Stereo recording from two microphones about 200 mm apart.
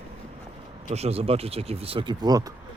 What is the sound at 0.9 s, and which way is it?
Speech, 30° right (ahead or behind).